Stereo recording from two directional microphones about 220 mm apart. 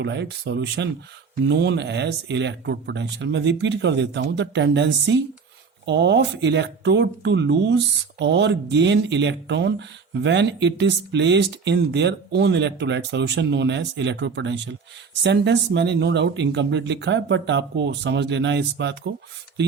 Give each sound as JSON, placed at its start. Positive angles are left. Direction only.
{"t": 0.0, "sound": "speech", "side_deg": -50}